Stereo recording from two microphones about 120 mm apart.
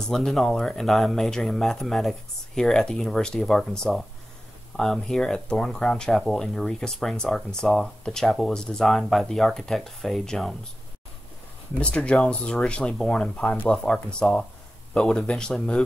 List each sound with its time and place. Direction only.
0.1 s speech: centre (ahead or behind)
11.8 s speech: 10° left (ahead or behind)